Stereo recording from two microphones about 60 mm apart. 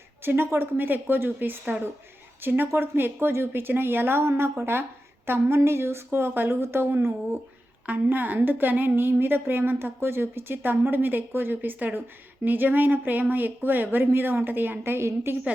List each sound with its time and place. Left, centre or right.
0.2 s a woman's voice: right